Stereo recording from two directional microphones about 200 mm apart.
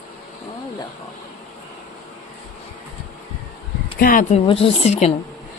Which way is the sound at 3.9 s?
45° left (ahead or behind).